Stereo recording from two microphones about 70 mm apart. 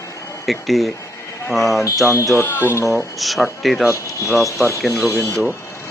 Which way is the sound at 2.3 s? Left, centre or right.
Left.